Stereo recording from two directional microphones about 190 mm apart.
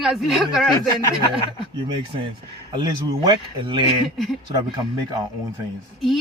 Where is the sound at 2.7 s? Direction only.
25° right (ahead or behind).